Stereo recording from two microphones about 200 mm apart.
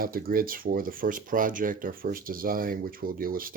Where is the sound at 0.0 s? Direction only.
45° right (ahead or behind).